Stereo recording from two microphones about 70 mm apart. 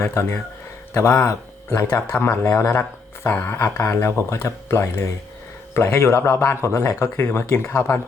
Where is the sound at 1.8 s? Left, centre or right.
Left.